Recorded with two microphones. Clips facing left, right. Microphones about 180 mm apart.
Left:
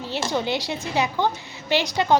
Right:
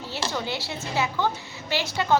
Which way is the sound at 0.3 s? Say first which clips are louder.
Left 6 dB; 20° left (ahead or behind).